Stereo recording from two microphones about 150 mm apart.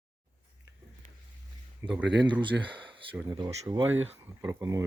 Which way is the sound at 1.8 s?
15° right (ahead or behind).